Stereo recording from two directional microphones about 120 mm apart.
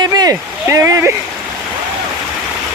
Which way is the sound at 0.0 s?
30° right (ahead or behind).